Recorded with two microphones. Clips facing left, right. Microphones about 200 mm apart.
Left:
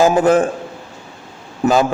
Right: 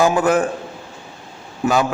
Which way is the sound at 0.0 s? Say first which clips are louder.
Left 3 dB; 30° left (ahead or behind).